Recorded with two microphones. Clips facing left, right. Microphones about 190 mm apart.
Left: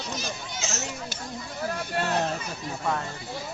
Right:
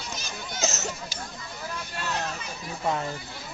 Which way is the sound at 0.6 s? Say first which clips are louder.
Right 4 dB; 40° right (ahead or behind).